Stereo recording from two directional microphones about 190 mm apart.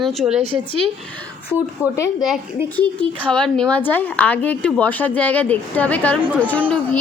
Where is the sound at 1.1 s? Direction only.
5° left (ahead or behind).